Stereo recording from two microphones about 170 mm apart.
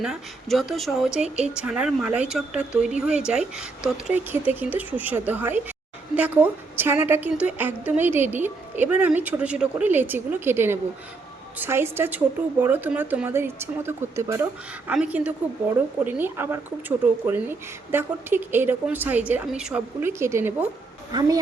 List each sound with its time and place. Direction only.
0.0 s speech: centre (ahead or behind); by 21.3 s 25° right (ahead or behind)